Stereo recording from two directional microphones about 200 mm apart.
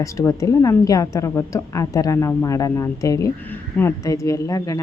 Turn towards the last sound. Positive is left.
turn(degrees=15)  # may be behind; listen again after turning